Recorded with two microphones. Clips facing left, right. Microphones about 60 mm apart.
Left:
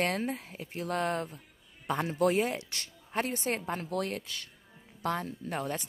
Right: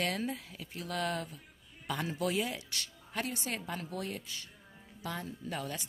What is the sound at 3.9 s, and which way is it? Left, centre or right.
Speech, left.